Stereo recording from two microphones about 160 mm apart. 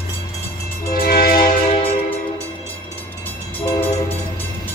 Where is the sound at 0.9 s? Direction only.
65° left (ahead or behind).